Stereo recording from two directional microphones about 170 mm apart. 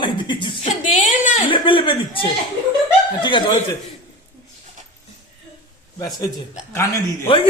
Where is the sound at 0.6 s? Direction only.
50° left (ahead or behind).